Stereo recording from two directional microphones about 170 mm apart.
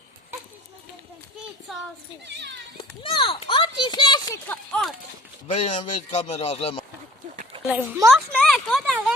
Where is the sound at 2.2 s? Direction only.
90° right.